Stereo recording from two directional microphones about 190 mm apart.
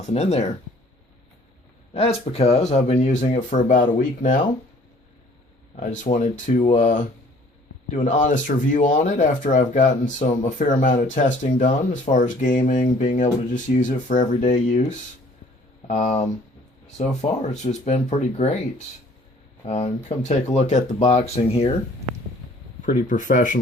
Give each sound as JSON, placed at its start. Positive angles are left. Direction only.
{"t": 0.1, "sound": "speech", "side_deg": 35}
{"t": 1.9, "sound": "speech", "side_deg": 30}
{"t": 5.7, "sound": "speech", "side_deg": 40}
{"t": 19.6, "sound": "speech", "side_deg": 35}
{"t": 22.9, "sound": "speech", "side_deg": 45}